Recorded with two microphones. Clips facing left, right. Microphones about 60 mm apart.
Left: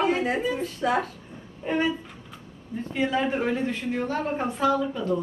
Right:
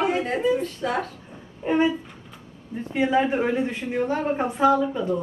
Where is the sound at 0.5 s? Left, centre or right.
Centre.